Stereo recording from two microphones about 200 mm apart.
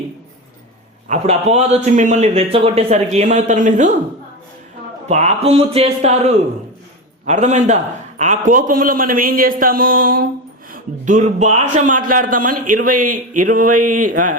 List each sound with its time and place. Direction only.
1.0 s a man's voice: 35° right (ahead or behind)
5.0 s a man's voice: 35° right (ahead or behind)
7.3 s a man's voice: 35° right (ahead or behind)